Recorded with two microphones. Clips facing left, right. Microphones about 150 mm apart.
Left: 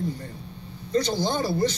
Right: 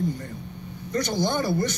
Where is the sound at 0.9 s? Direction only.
25° left (ahead or behind).